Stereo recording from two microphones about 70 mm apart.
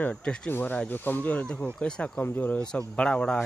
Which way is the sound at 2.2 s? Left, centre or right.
Left.